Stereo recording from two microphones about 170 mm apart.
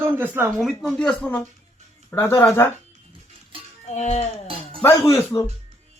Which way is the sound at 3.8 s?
40° left (ahead or behind).